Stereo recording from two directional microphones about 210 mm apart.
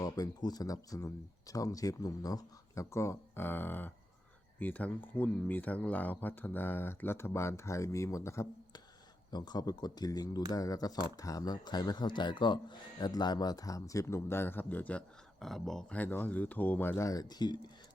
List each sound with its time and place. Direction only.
0.0 s a man's voice: 20° left (ahead or behind)